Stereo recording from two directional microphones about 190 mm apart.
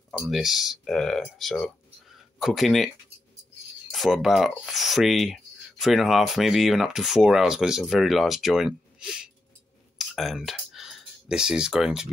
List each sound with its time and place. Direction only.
0.3 s speech: centre (ahead or behind)
3.9 s speech: centre (ahead or behind)
9.9 s clicking: centre (ahead or behind)